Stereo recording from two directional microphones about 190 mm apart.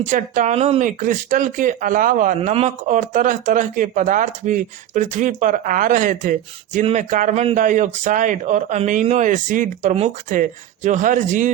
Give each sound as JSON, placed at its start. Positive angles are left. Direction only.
{"t": 0.0, "sound": "a man's voice", "side_deg": -40}